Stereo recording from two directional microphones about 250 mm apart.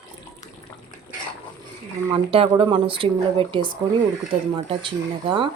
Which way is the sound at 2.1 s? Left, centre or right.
Right.